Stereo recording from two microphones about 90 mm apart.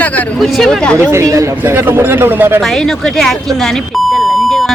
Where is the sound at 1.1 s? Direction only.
35° right (ahead or behind).